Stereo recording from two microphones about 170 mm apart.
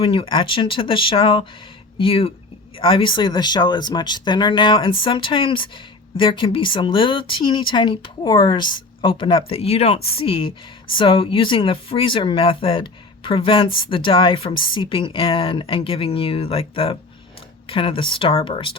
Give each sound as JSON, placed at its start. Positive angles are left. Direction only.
{"t": 0.0, "sound": "speech", "side_deg": 30}